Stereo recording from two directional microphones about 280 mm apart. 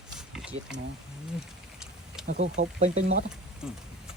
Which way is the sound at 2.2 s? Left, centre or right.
Right.